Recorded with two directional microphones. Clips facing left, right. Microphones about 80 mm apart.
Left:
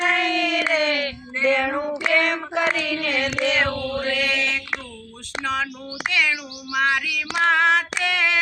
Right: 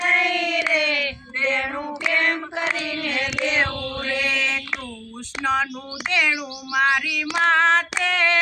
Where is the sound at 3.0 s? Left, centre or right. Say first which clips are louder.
Left 1 dB; left.